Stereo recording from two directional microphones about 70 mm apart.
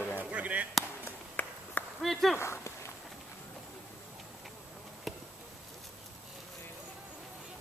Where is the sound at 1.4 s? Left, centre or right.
Left.